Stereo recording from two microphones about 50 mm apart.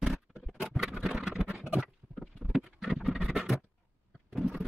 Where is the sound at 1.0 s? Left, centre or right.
Centre.